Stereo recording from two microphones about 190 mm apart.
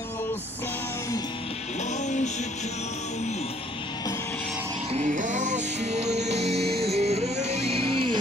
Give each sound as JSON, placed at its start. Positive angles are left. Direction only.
{"t": 2.0, "sound": "music", "side_deg": 40}
{"t": 4.9, "sound": "music", "side_deg": -40}